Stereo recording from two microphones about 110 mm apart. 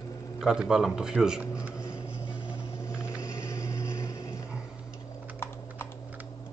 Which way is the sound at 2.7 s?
25° left (ahead or behind).